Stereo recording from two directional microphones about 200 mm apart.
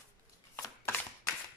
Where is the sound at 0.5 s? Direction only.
10° left (ahead or behind).